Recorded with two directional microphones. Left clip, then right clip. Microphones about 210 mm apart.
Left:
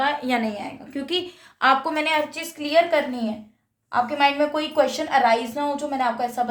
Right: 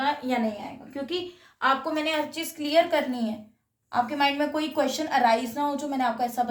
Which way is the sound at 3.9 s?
25° left (ahead or behind).